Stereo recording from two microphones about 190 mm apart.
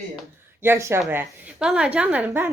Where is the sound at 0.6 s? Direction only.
15° right (ahead or behind).